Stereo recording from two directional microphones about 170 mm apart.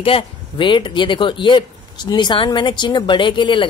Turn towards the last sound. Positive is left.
turn(degrees=30)  # may be behind; listen again after turning